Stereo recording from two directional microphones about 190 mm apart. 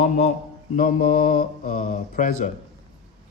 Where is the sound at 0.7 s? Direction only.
45° left (ahead or behind).